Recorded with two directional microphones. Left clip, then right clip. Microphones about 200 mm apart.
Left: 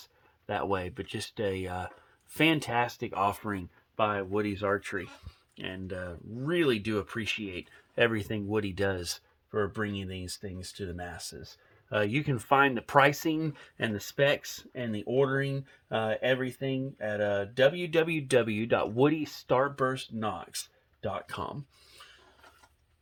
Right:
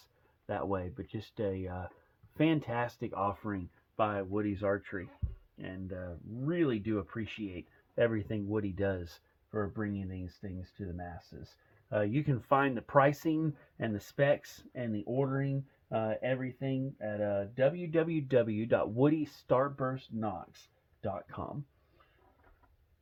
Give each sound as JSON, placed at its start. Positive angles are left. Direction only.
{"t": 0.0, "sound": "speech", "side_deg": 25}